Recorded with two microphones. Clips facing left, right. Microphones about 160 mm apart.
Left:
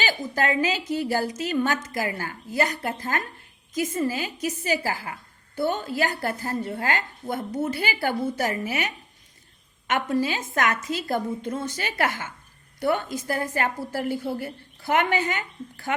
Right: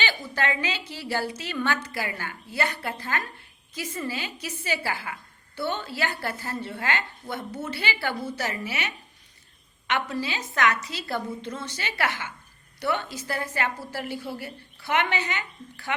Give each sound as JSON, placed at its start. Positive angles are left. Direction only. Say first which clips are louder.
{"t": 0.0, "sound": "a woman's voice", "louder": "left 3 dB", "side_deg": 40}